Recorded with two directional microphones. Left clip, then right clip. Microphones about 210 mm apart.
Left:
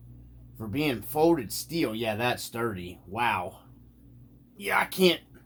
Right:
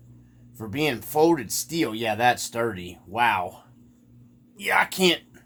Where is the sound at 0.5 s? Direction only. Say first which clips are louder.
Right 4 dB; 30° right (ahead or behind).